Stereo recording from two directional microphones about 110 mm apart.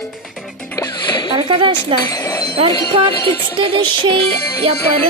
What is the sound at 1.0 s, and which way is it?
Splash, 45° left (ahead or behind).